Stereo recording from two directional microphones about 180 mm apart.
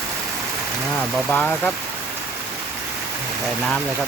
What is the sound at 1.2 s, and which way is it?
Speech, 5° left (ahead or behind).